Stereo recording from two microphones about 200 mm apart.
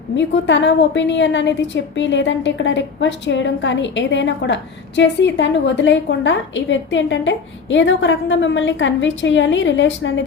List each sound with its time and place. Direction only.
0.2 s a woman's voice: 65° left (ahead or behind)